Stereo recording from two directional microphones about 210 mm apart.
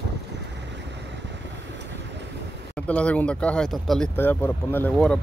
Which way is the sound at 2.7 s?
5° left (ahead or behind).